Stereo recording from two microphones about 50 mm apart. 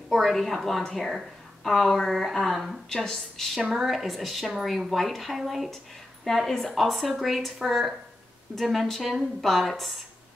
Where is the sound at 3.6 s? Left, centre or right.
Centre.